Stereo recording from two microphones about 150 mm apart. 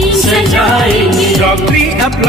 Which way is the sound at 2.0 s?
Centre (ahead or behind).